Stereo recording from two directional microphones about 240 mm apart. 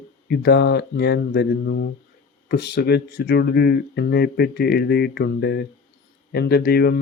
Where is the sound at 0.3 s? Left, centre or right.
Left.